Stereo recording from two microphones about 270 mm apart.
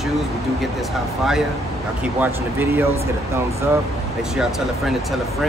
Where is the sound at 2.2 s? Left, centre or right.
Centre.